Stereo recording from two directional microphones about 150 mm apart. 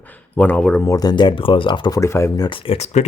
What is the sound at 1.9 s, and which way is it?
Speech, 20° left (ahead or behind).